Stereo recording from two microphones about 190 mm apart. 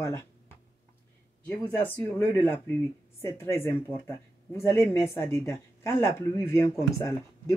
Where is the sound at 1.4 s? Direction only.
10° left (ahead or behind).